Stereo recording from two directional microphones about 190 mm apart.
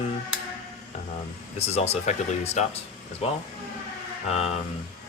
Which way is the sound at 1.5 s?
35° left (ahead or behind).